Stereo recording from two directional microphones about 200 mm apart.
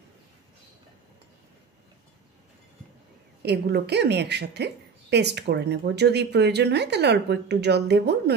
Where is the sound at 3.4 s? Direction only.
55° right (ahead or behind).